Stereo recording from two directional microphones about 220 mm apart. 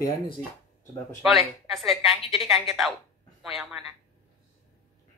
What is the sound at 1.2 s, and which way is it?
Speech, centre (ahead or behind).